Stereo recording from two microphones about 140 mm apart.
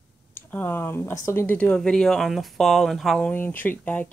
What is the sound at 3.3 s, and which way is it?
Speech, 15° left (ahead or behind).